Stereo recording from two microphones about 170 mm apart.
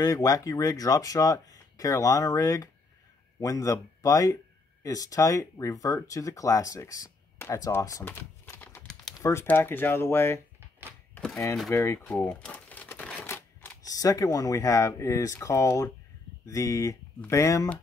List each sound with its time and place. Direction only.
0.0 s speech: 20° left (ahead or behind)
11.7 s speech: 15° left (ahead or behind)